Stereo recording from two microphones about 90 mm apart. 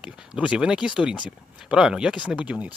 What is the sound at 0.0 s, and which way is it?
Speech, 15° right (ahead or behind).